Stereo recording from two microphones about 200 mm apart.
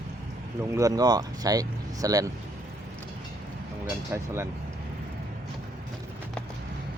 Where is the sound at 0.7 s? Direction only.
15° right (ahead or behind).